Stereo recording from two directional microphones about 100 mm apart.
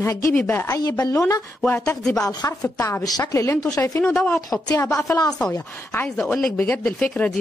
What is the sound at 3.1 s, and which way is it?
Speech, 35° left (ahead or behind).